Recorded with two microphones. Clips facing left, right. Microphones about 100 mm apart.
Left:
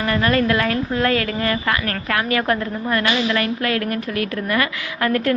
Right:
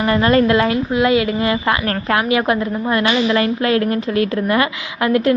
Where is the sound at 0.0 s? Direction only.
25° right (ahead or behind).